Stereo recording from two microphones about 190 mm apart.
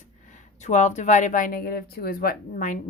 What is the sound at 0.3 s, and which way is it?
Speech, 40° left (ahead or behind).